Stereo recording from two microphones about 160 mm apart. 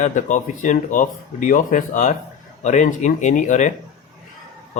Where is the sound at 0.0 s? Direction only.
50° left (ahead or behind).